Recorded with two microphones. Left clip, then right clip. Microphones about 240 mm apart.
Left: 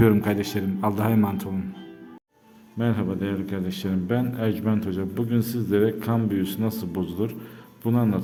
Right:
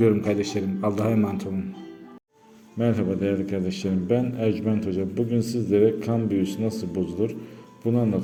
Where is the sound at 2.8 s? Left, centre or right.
Centre.